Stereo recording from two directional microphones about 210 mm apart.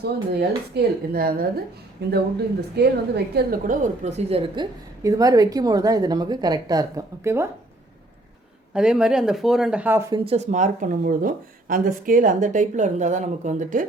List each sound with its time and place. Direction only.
0.0 s a woman's voice: 50° right (ahead or behind); by 7.4 s 15° right (ahead or behind)
8.7 s speech: 5° right (ahead or behind)
10.2 s speech: 30° right (ahead or behind)